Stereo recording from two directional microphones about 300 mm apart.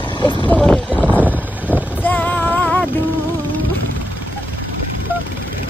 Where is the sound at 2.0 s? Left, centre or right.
Centre.